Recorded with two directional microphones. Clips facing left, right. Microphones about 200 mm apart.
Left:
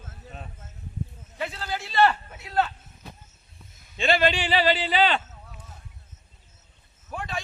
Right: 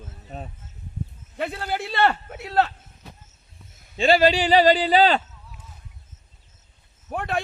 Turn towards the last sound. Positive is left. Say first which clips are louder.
# right 7 dB
turn(degrees=-60)  # may be behind; listen again after turning